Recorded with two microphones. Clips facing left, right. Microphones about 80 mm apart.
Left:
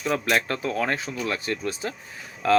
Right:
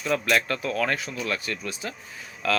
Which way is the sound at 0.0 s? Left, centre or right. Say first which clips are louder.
Even; left.